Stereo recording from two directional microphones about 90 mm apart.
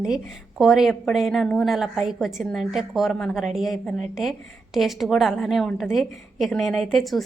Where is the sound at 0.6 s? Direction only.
5° right (ahead or behind).